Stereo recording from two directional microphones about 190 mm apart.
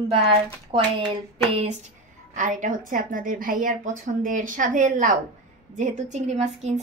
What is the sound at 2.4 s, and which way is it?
A woman's voice, 40° right (ahead or behind).